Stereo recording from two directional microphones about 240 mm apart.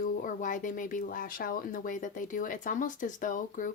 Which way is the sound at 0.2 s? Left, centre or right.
Left.